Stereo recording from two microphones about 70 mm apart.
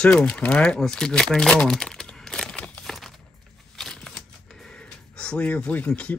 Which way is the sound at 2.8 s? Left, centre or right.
Centre.